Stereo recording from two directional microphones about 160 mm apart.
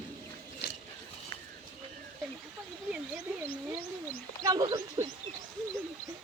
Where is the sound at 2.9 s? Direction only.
10° right (ahead or behind).